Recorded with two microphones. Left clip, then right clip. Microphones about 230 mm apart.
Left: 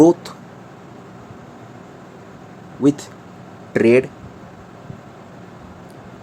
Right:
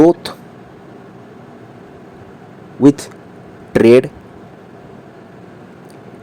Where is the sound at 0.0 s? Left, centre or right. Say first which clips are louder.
Right 2 dB; right.